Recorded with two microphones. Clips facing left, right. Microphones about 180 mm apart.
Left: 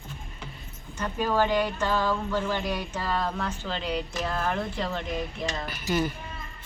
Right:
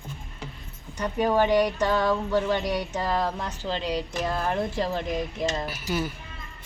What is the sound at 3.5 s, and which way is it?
Speech, 30° right (ahead or behind).